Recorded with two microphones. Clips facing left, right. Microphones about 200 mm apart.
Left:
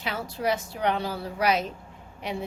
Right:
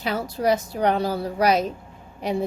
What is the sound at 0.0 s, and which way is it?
A woman's voice, 40° right (ahead or behind).